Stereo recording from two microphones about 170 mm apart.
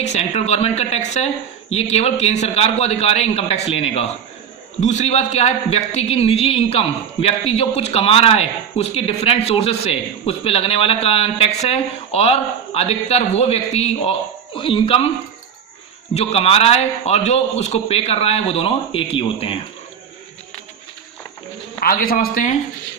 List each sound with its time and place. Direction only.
0.0 s a man's voice: 40° left (ahead or behind)
16.1 s a man's voice: 35° left (ahead or behind)
21.8 s speech: 60° left (ahead or behind)